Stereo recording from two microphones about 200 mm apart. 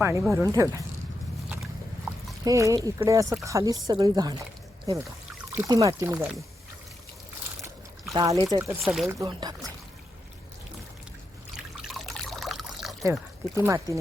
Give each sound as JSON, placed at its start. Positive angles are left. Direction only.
{"t": 0.0, "sound": "speech", "side_deg": -15}
{"t": 2.4, "sound": "speech", "side_deg": -15}
{"t": 5.5, "sound": "speech", "side_deg": -15}
{"t": 8.1, "sound": "speech", "side_deg": -20}
{"t": 8.6, "sound": "speech", "side_deg": 0}
{"t": 9.0, "sound": "speech", "side_deg": -20}
{"t": 11.8, "sound": "trickle", "side_deg": 0}
{"t": 13.1, "sound": "speech", "side_deg": -15}